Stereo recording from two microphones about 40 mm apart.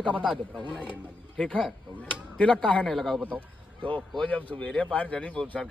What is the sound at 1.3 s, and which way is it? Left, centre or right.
Speech, left.